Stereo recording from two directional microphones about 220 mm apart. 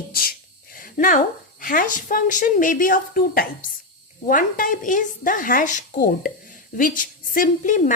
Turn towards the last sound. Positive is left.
turn(degrees=35)  # may be behind; listen again after turning